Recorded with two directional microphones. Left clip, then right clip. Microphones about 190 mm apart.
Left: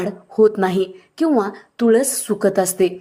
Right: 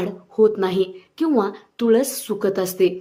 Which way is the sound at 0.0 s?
25° left (ahead or behind).